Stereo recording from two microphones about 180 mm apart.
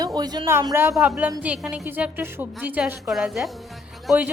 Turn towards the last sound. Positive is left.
turn(degrees=-10)  # may be behind; listen again after turning